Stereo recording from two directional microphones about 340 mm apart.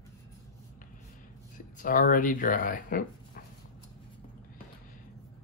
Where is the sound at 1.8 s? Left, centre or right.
Left.